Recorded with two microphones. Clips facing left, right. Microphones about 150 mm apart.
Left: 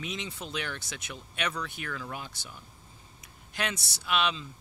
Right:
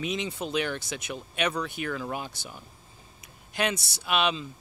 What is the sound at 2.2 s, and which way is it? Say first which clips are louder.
Speech: right 5 dB; 40° right (ahead or behind).